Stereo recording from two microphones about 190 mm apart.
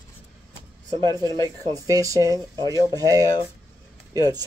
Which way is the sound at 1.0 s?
20° right (ahead or behind).